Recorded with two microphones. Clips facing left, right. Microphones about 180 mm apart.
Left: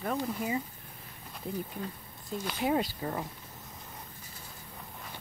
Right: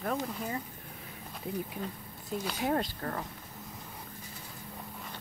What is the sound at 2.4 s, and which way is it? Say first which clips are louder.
Speech: left 2 dB; 5° left (ahead or behind).